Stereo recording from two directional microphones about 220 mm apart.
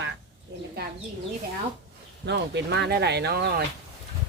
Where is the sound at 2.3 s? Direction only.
50° right (ahead or behind).